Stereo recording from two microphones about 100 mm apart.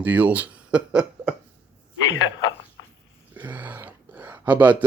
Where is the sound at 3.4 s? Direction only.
20° right (ahead or behind).